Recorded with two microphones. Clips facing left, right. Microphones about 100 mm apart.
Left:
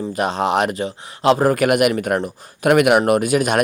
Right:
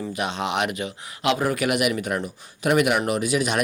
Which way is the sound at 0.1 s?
40° left (ahead or behind).